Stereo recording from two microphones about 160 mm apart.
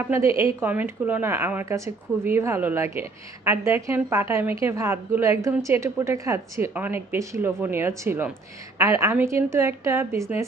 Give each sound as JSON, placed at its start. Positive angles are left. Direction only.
{"t": 0.0, "sound": "a woman's voice", "side_deg": -15}